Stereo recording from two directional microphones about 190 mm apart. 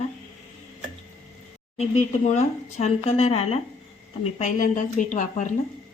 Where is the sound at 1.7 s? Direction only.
35° left (ahead or behind).